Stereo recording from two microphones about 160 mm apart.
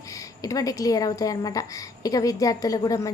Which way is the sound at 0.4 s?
20° left (ahead or behind).